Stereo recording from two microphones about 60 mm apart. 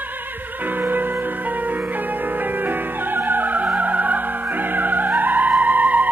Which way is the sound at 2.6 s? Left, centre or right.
Right.